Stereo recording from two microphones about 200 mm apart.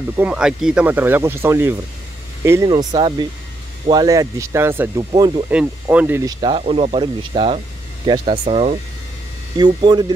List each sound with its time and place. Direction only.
0.2 s speech: 5° right (ahead or behind)
5.5 s speech: 5° right (ahead or behind)